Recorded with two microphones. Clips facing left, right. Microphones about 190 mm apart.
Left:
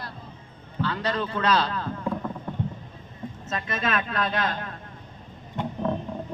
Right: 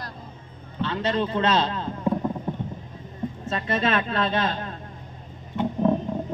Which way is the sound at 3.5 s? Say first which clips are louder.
Right 4 dB; 30° right (ahead or behind).